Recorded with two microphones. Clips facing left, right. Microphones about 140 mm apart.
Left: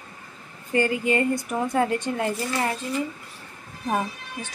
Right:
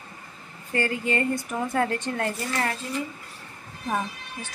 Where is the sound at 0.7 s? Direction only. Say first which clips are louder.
Left 4 dB; 15° left (ahead or behind).